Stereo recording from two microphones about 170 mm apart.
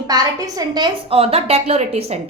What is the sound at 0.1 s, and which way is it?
A woman's voice, 20° right (ahead or behind).